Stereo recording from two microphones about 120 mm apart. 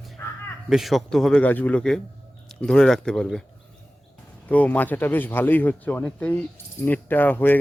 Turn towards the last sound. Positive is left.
turn(degrees=15)  # may be behind; listen again after turning